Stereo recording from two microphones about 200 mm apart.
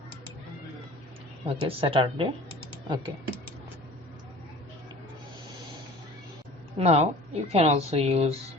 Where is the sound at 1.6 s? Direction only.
25° right (ahead or behind).